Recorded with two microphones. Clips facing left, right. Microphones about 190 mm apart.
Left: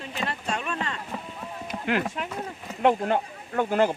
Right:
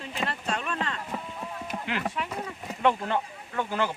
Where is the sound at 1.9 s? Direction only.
50° left (ahead or behind).